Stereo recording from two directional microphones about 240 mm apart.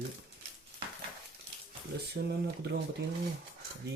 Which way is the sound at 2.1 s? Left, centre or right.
Right.